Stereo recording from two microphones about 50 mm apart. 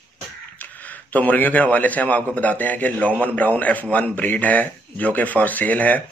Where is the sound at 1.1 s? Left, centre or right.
Left.